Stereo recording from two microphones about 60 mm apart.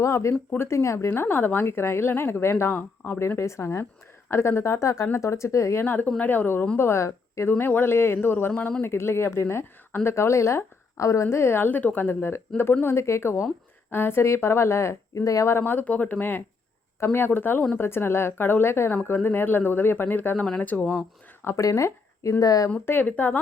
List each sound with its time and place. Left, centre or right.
0.0 s speech: left
0.9 s a woman's voice: left
3.2 s a woman's voice: left
5.8 s a woman's voice: left
6.7 s speech: left
7.6 s a woman's voice: left
15.1 s speech: left
15.4 s a woman's voice: left
21.5 s speech: left
22.4 s speech: left
23.0 s speech: left